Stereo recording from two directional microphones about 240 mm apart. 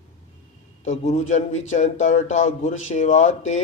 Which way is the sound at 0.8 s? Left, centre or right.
Left.